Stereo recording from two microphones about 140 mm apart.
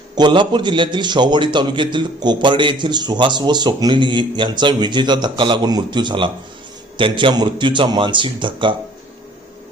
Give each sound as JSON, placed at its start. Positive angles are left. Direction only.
{"t": 0.2, "sound": "a man's voice", "side_deg": -35}